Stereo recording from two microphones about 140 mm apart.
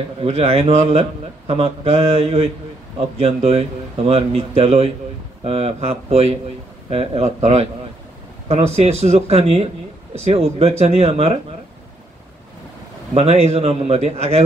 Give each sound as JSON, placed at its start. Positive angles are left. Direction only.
{"t": 0.2, "sound": "a man's voice", "side_deg": -45}
{"t": 13.1, "sound": "a man's voice", "side_deg": -45}